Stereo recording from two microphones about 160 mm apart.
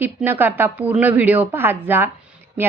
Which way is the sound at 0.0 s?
10° right (ahead or behind).